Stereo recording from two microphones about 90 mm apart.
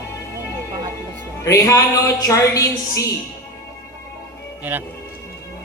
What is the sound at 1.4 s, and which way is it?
A man's voice, 35° left (ahead or behind).